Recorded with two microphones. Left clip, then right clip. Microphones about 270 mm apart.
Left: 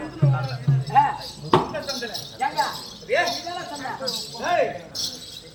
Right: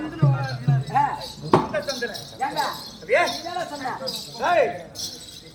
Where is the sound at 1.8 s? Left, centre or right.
Centre.